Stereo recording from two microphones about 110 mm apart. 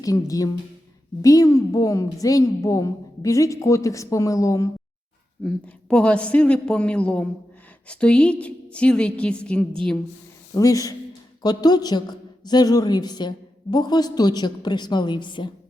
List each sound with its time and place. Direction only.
0.0 s a woman's voice: 35° left (ahead or behind)
5.4 s a woman's voice: 10° left (ahead or behind)
10.5 s a woman's voice: 30° left (ahead or behind)